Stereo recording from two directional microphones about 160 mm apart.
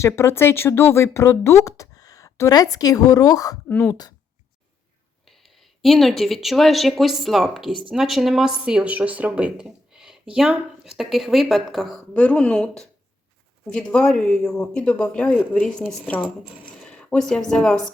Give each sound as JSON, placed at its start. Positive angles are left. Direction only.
{"t": 0.0, "sound": "speech", "side_deg": 15}
{"t": 3.7, "sound": "speech", "side_deg": 10}
{"t": 5.2, "sound": "a woman's voice", "side_deg": 0}